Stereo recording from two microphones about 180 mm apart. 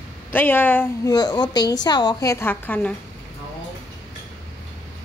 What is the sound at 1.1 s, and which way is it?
A woman's voice, 20° left (ahead or behind).